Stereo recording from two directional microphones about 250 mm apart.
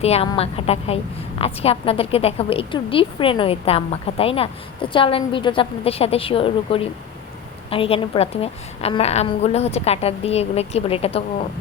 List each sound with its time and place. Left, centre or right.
0.0 s a woman's voice: left